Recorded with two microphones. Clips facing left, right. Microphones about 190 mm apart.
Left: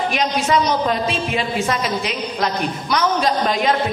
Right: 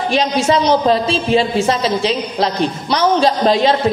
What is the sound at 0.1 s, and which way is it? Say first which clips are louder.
A man's voice: right 7 dB; 30° right (ahead or behind).